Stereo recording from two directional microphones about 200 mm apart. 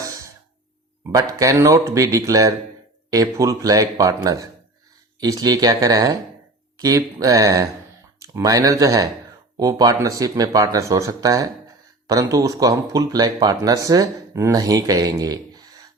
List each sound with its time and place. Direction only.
1.0 s speech: 15° right (ahead or behind)